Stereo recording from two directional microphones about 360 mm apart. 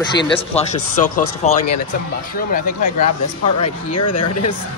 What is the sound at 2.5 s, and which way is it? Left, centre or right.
Speech, left.